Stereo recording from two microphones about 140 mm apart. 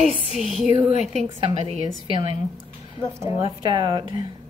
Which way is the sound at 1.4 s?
35° right (ahead or behind).